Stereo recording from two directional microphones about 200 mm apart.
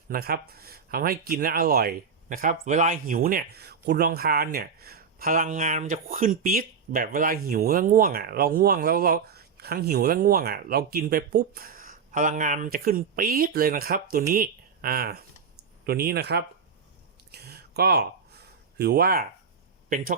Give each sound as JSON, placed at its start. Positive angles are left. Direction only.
{"t": 0.1, "sound": "speech", "side_deg": -50}
{"t": 17.3, "sound": "a sound", "side_deg": -50}
{"t": 18.8, "sound": "speech", "side_deg": -50}